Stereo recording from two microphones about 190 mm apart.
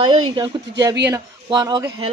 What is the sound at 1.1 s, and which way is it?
Speech, 20° right (ahead or behind).